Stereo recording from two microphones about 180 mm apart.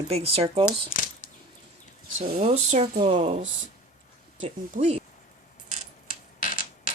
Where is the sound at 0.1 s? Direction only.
35° right (ahead or behind).